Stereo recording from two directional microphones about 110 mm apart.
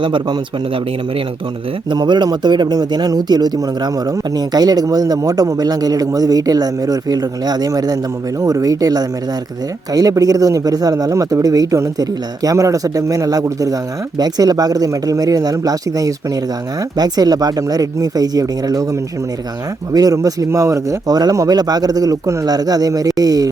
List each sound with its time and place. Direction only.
0.0 s a man's voice: 45° right (ahead or behind)
1.9 s a man's voice: 40° right (ahead or behind)
19.9 s a man's voice: 35° right (ahead or behind)